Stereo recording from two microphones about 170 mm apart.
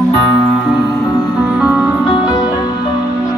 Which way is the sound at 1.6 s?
5° right (ahead or behind).